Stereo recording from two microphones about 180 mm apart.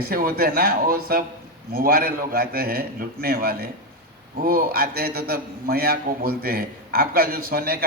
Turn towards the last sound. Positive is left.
turn(degrees=-55)  # may be behind; listen again after turning